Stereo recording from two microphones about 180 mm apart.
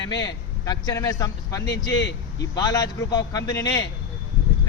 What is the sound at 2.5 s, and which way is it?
A man's voice, 20° left (ahead or behind).